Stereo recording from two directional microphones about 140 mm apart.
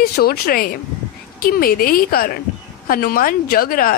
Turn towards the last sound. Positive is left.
turn(degrees=90)